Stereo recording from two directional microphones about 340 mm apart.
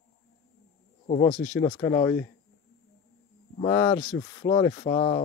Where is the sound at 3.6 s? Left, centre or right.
Centre.